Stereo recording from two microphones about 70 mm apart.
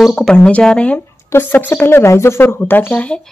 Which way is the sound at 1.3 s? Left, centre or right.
Left.